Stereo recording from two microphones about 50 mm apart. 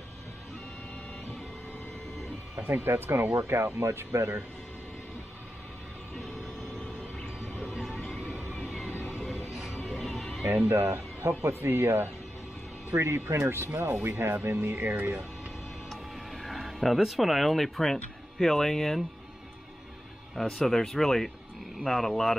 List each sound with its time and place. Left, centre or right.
2.6 s speech: right
3.3 s speech: right
6.1 s a sound: centre
7.5 s music: centre
8.1 s music: centre
8.5 s vehicle: centre
9.0 s music: centre
10.7 s speech: right
13.7 s speech: right
15.9 s a sound: centre
18.4 s speech: centre
20.3 s speech: centre